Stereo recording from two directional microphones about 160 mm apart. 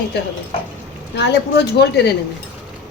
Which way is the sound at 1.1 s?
90° left.